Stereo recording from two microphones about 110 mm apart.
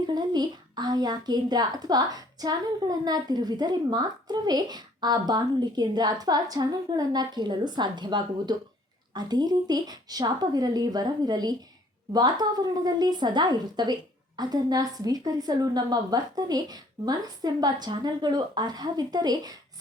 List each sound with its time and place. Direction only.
0.1 s a woman's voice: 40° right (ahead or behind)